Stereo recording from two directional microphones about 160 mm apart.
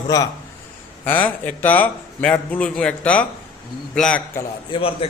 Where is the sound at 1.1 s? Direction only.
10° left (ahead or behind).